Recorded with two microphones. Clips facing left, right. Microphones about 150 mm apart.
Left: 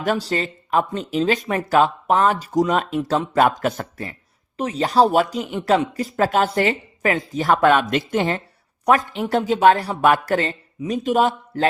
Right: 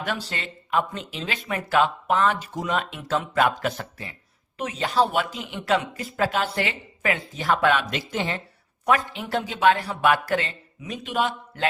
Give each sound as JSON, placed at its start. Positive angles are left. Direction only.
{"t": 0.0, "sound": "speech", "side_deg": 40}
{"t": 4.5, "sound": "speech", "side_deg": 35}